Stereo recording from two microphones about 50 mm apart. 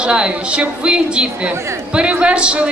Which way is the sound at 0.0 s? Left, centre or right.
Right.